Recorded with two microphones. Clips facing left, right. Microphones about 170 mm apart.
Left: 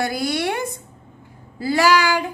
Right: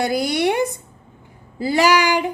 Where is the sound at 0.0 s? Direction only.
20° right (ahead or behind).